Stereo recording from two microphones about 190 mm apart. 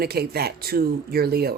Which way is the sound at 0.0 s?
55° right (ahead or behind).